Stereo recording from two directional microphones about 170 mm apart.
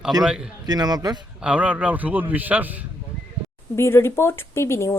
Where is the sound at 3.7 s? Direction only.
15° left (ahead or behind).